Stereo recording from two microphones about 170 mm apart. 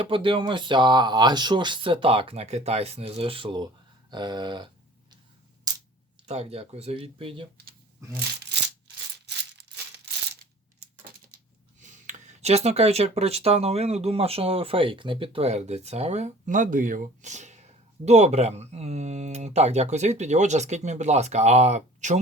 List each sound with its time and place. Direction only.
0.0 s speech: 30° right (ahead or behind)
5.7 s a sound: 20° right (ahead or behind)
6.2 s speech: 40° right (ahead or behind)
11.8 s speech: 45° right (ahead or behind)